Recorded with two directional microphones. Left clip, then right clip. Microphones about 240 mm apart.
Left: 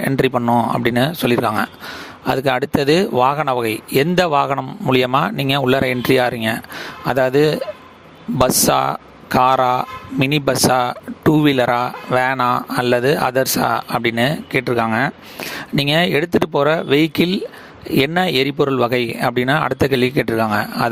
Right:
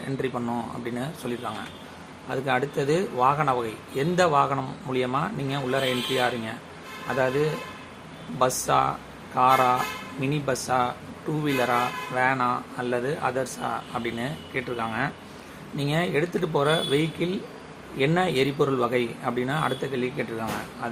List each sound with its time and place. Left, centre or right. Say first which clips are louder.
0.2 s speech: left 14 dB; left